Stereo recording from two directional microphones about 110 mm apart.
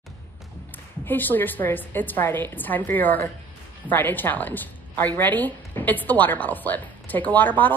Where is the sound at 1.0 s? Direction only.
15° left (ahead or behind).